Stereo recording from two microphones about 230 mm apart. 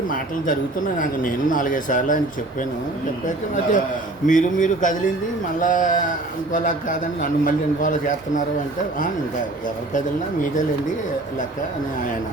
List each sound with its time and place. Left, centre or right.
0.9 s a man's voice: left